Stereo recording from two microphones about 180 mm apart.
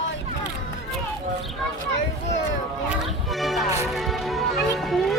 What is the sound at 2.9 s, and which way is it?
Music, centre (ahead or behind).